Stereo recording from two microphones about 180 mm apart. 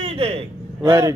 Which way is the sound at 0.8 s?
20° right (ahead or behind).